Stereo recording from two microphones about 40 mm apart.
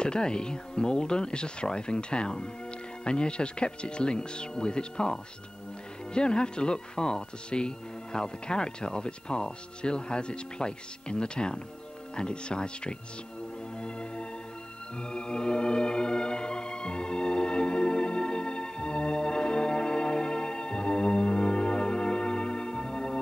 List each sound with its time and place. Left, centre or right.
0.0 s speech: left
13.7 s music: left
15.0 s organ: left